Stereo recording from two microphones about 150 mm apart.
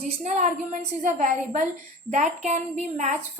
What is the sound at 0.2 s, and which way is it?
A woman's voice, 55° right (ahead or behind).